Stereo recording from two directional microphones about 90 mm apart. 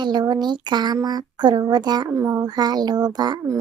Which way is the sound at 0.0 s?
55° right (ahead or behind).